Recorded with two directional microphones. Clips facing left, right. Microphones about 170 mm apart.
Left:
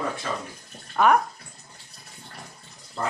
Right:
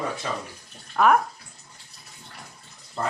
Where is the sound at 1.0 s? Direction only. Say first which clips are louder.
Even; centre (ahead or behind).